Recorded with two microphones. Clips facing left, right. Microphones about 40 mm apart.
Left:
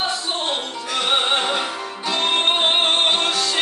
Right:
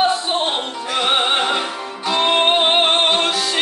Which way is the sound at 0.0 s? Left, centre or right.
Right.